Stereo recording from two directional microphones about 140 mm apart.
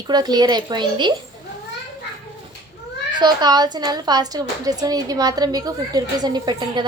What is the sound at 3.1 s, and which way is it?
A woman's voice, 30° right (ahead or behind).